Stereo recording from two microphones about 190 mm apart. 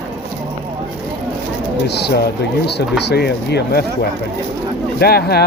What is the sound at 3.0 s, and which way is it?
Speech, 60° left (ahead or behind).